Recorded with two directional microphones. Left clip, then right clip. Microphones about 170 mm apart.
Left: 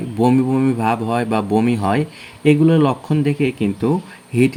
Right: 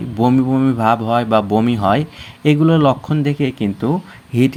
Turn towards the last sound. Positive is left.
turn(degrees=-20)  # may be behind; listen again after turning